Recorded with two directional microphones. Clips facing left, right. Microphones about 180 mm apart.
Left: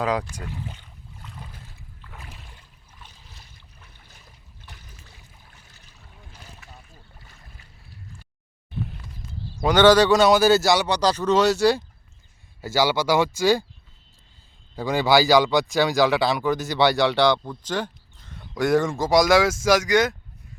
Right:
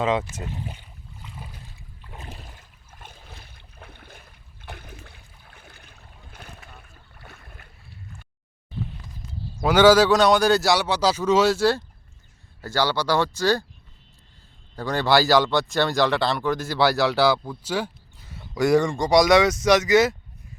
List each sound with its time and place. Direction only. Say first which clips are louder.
0.0 s speech: right 1 dB; centre (ahead or behind)
0.3 s speech: right 1 dB; 20° right (ahead or behind)
2.0 s a sound: right 4 dB; 20° right (ahead or behind)
2.6 s a sound: right 3 dB; 50° right (ahead or behind)
5.5 s boat: right 5 dB; 55° right (ahead or behind)
9.6 s speech: even; 5° right (ahead or behind); by 13.7 s 10° left (ahead or behind)
14.8 s speech: left 2 dB; 15° left (ahead or behind)
15.0 s speech: left 1 dB; centre (ahead or behind)